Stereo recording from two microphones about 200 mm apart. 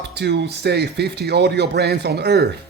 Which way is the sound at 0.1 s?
55° right (ahead or behind).